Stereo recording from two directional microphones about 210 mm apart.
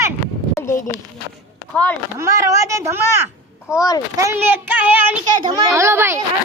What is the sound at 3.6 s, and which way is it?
Speech, 15° left (ahead or behind).